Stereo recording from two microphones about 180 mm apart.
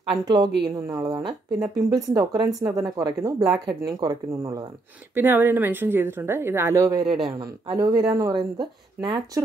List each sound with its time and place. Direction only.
0.2 s speech: 25° right (ahead or behind)
3.3 s speech: centre (ahead or behind)
3.6 s a woman's voice: 20° right (ahead or behind)